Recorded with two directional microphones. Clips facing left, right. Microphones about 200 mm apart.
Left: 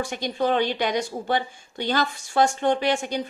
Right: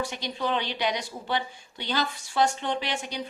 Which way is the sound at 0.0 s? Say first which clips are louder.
Left 5 dB; 50° left (ahead or behind).